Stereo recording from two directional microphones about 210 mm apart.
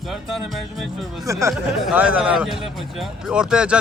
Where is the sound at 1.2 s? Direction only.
15° right (ahead or behind).